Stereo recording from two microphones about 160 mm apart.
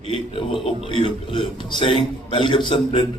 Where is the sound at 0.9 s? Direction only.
30° left (ahead or behind).